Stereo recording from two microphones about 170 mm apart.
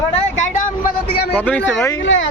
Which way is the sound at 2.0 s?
90° left.